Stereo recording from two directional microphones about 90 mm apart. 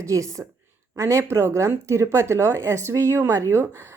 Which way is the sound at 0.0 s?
40° right (ahead or behind).